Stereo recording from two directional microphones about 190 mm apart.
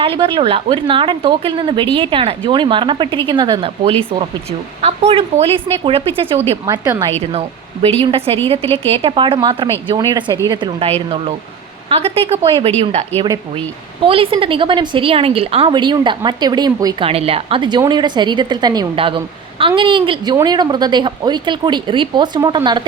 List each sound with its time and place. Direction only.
0.0 s speech: 25° right (ahead or behind)
6.7 s a woman's voice: 20° right (ahead or behind)
7.2 s speech: 30° right (ahead or behind)